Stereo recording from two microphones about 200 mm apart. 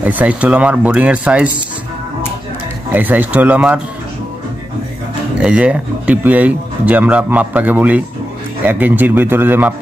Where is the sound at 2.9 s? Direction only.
10° right (ahead or behind).